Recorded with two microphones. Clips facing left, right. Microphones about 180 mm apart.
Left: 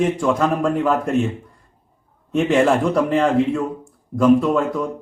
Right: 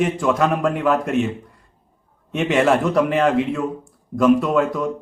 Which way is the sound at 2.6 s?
Centre (ahead or behind).